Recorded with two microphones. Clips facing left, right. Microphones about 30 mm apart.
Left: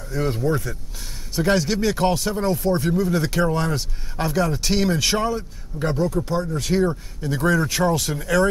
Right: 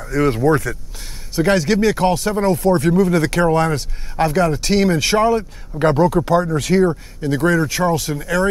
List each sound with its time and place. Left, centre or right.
0.0 s a man's voice: right
1.4 s speech: right
2.0 s speech: centre
5.3 s a man's voice: right
6.0 s speech: right
6.8 s speech: right
7.6 s speech: centre